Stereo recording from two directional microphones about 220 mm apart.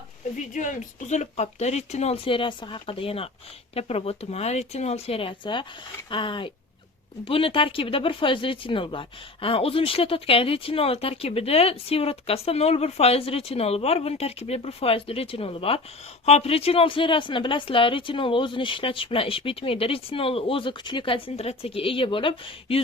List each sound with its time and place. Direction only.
0.5 s speech: 35° left (ahead or behind)